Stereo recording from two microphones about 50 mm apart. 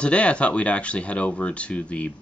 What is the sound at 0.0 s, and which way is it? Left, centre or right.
Speech, left.